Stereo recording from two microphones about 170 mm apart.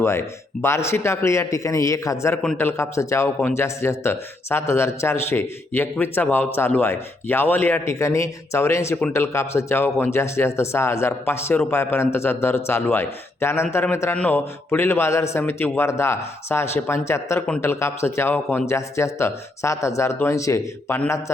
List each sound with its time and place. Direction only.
0.0 s speech: 15° left (ahead or behind)